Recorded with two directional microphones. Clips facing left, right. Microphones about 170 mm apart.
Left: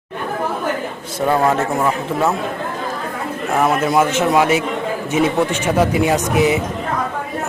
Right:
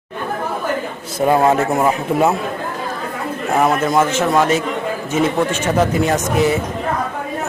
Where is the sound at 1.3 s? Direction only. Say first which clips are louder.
Right 2 dB; 20° right (ahead or behind).